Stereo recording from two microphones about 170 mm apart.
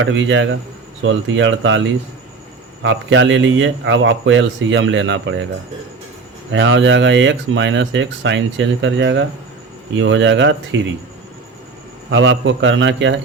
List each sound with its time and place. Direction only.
0.0 s speech: 90° right
6.5 s speech: 90° right
12.1 s speech: 90° right